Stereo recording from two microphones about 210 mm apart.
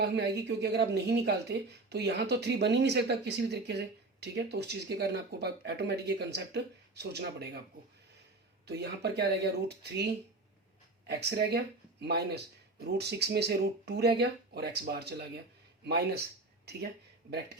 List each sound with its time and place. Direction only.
0.0 s speech: 50° right (ahead or behind)
8.6 s speech: 50° right (ahead or behind)